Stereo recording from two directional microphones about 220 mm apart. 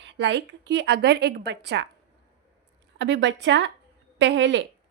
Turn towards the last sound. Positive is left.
turn(degrees=-55)  # may be behind; listen again after turning